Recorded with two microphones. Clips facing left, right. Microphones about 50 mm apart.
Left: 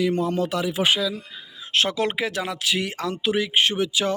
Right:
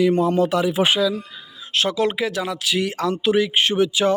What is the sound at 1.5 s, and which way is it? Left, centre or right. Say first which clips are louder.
Speech: right 2 dB; left.